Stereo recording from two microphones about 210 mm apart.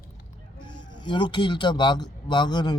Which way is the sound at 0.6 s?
20° left (ahead or behind).